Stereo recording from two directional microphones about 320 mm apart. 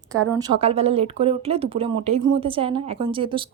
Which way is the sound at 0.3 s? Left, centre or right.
Centre.